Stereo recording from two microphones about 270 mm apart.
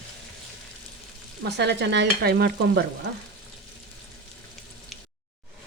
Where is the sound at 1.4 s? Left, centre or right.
Right.